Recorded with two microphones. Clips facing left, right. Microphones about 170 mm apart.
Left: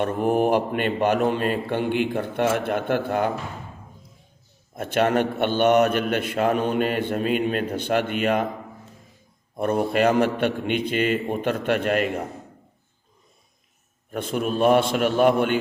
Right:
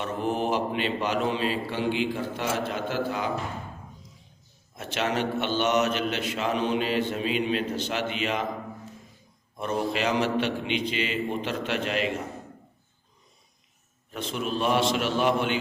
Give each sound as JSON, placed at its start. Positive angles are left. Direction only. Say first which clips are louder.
{"t": 0.0, "sound": "a man's voice", "louder": "left 7 dB", "side_deg": 55}
{"t": 4.7, "sound": "a man's voice", "louder": "left 7 dB", "side_deg": 55}
{"t": 9.6, "sound": "a man's voice", "louder": "left 7 dB", "side_deg": 55}
{"t": 14.1, "sound": "a man's voice", "louder": "left 5 dB", "side_deg": 50}